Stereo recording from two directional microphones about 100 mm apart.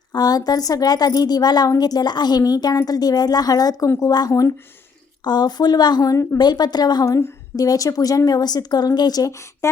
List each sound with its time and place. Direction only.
0.1 s a woman's voice: 40° left (ahead or behind)
5.2 s a woman's voice: 45° left (ahead or behind)